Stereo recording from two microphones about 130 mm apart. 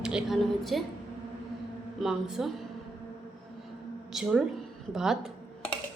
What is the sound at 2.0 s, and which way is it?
Speech, centre (ahead or behind).